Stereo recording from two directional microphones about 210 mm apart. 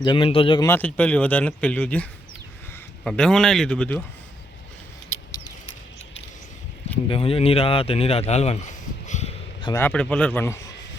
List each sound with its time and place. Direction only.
0.0 s speech: 25° left (ahead or behind)
0.7 s a man's voice: 5° left (ahead or behind)
7.1 s speech: 25° left (ahead or behind)
9.7 s speech: 5° left (ahead or behind)